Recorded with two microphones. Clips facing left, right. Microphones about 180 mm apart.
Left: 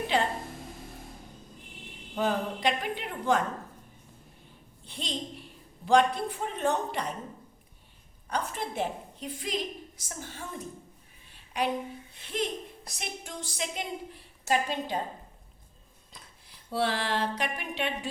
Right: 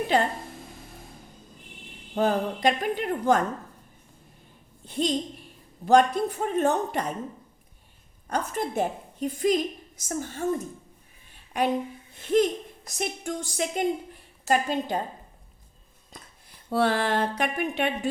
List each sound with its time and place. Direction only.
0.1 s a woman's voice: 45° right (ahead or behind)
2.1 s a woman's voice: 45° right (ahead or behind)
4.9 s a woman's voice: 45° right (ahead or behind)
8.3 s a woman's voice: 45° right (ahead or behind)
12.1 s a woman's voice: 45° right (ahead or behind)
16.1 s a sound: 50° right (ahead or behind)